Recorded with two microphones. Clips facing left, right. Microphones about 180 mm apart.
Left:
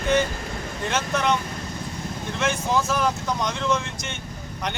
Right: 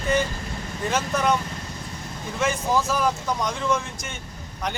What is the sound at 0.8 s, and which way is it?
Speech, 5° right (ahead or behind).